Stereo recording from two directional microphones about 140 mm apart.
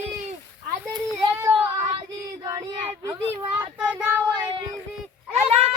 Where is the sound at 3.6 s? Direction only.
10° right (ahead or behind).